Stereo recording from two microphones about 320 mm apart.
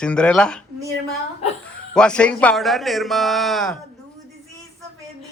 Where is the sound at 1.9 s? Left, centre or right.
Centre.